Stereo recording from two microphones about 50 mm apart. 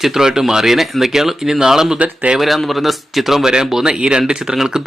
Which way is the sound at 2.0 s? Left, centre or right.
Right.